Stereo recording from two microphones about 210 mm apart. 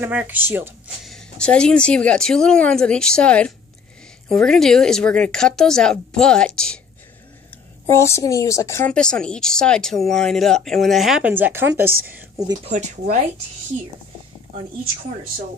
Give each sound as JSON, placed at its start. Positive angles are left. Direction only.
{"t": 0.0, "sound": "a woman's voice", "side_deg": -10}
{"t": 1.0, "sound": "speech", "side_deg": 5}
{"t": 7.9, "sound": "a woman's voice", "side_deg": 15}
{"t": 12.6, "sound": "speech", "side_deg": -35}